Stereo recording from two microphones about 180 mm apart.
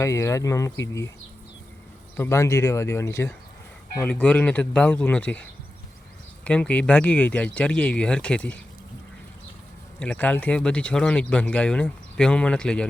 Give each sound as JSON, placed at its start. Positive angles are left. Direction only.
{"t": 0.0, "sound": "speech", "side_deg": 15}
{"t": 2.1, "sound": "speech", "side_deg": 15}
{"t": 10.0, "sound": "speech", "side_deg": 5}